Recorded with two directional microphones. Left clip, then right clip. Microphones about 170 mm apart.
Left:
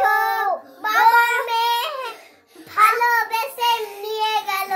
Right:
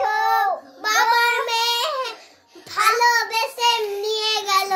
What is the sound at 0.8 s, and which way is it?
Child singing, 55° right (ahead or behind).